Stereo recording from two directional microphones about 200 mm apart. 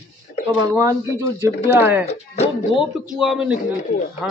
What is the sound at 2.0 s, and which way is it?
Speech, 30° left (ahead or behind).